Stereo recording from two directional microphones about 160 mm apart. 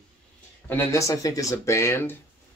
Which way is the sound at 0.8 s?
20° left (ahead or behind).